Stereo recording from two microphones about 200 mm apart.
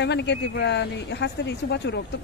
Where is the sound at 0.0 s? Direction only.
60° left (ahead or behind).